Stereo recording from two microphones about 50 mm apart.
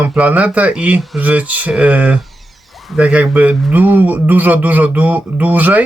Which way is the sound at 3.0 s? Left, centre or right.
Right.